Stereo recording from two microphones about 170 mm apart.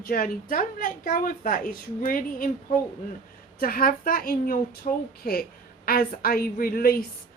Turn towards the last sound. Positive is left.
turn(degrees=60)  # may be behind; listen again after turning